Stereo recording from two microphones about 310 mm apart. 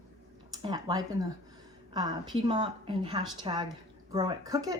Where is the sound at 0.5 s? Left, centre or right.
Centre.